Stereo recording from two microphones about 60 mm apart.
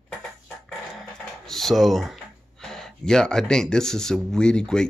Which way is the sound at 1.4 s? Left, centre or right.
Centre.